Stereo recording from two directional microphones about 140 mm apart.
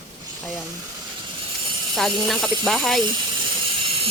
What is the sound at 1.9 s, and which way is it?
Speech, centre (ahead or behind).